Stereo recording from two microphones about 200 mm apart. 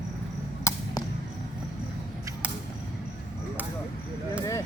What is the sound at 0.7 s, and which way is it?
Arrow, 15° left (ahead or behind).